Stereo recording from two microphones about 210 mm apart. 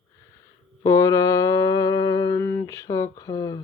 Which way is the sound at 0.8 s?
15° left (ahead or behind).